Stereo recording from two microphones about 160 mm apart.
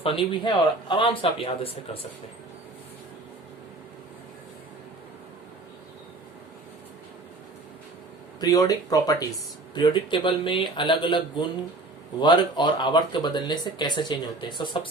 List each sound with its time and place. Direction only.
0.0 s speech: 30° left (ahead or behind)
8.4 s speech: 20° left (ahead or behind)